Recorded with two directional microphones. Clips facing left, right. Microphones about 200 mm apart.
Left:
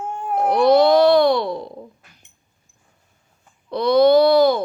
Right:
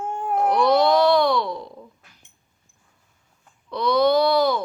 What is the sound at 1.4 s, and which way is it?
Speech, 30° left (ahead or behind).